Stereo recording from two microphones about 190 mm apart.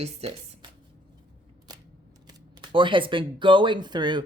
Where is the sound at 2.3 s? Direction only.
25° right (ahead or behind).